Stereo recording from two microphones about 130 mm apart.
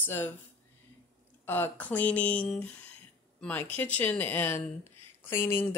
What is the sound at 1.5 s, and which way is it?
A woman's voice, 15° left (ahead or behind).